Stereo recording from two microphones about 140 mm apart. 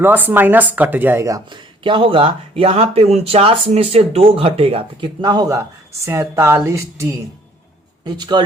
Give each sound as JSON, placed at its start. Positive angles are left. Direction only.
{"t": 0.0, "sound": "speech", "side_deg": -15}
{"t": 1.5, "sound": "speech", "side_deg": -35}
{"t": 8.0, "sound": "speech", "side_deg": -30}